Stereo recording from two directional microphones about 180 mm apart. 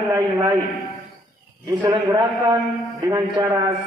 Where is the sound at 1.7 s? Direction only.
25° right (ahead or behind).